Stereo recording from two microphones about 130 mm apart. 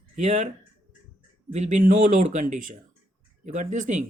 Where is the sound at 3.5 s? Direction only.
70° right (ahead or behind).